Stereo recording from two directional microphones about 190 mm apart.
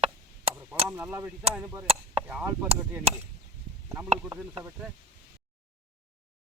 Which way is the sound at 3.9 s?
10° right (ahead or behind).